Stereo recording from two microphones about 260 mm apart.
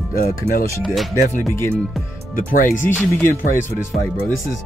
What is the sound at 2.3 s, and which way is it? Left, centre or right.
Speech, left.